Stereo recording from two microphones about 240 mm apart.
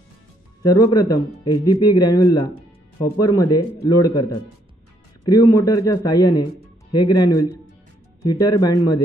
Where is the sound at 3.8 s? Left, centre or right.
Centre.